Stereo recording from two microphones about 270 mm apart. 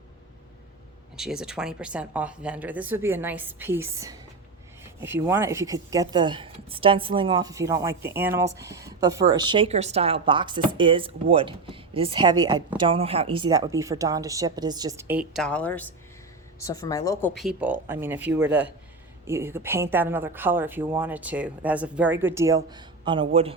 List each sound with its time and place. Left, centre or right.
1.1 s a man's voice: centre; by 23.6 s right